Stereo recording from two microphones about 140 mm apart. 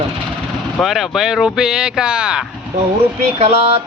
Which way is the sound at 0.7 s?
Centre (ahead or behind).